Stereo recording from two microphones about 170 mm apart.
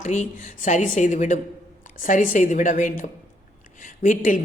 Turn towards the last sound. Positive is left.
turn(degrees=50)  # may be behind; listen again after turning